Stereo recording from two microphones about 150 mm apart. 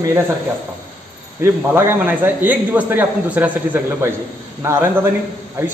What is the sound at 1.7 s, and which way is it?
Speech, 15° right (ahead or behind).